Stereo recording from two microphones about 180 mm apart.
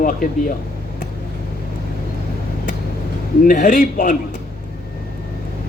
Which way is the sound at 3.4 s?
50° left (ahead or behind).